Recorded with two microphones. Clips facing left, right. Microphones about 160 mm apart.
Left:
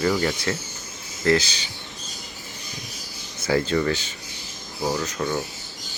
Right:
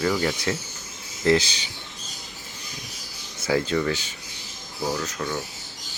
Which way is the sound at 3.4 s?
10° right (ahead or behind).